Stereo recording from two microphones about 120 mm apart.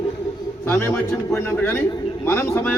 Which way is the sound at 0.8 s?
20° left (ahead or behind).